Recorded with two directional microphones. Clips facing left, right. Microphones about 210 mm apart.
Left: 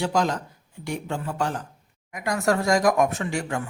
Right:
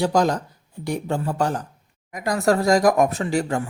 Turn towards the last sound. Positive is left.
turn(degrees=-35)  # may be behind; listen again after turning